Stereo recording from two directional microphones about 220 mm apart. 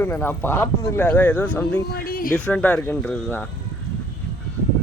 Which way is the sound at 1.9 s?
40° left (ahead or behind).